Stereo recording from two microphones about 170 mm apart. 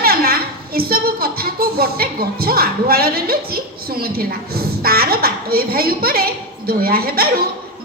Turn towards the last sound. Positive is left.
turn(degrees=-60)  # may be behind; listen again after turning